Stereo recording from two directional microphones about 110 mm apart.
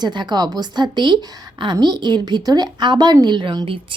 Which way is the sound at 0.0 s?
40° right (ahead or behind).